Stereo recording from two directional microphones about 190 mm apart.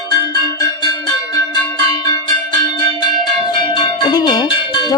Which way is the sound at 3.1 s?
25° left (ahead or behind).